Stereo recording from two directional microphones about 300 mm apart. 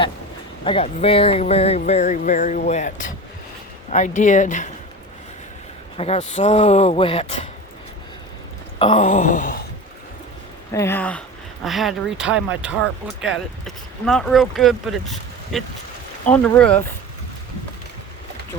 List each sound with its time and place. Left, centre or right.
0.6 s speech: centre
6.0 s speech: left
8.8 s speech: centre
10.7 s speech: centre